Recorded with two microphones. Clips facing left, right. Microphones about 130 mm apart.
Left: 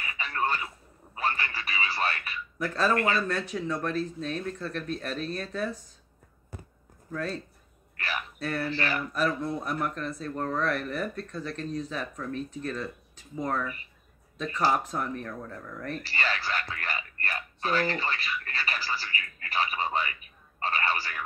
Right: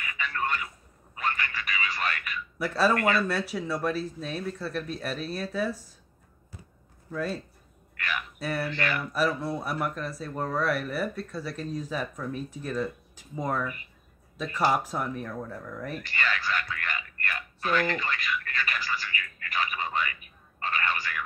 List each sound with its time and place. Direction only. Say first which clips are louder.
0.0 s radio: left 1 dB; 35° left (ahead or behind)
1.1 s television: left 1 dB; 30° left (ahead or behind)
2.6 s speech: right 2 dB; 5° right (ahead or behind)
6.5 s a sound: left 5 dB; 55° left (ahead or behind)
7.1 s speech: right 2 dB; 5° right (ahead or behind)
8.0 s a sound: right 1 dB; 35° left (ahead or behind)
8.4 s speech: right 1 dB; 10° right (ahead or behind)
8.6 s speech: even; 35° left (ahead or behind)
9.1 s speech: right 2 dB; 10° right (ahead or behind)
16.0 s a sound: even; 35° left (ahead or behind)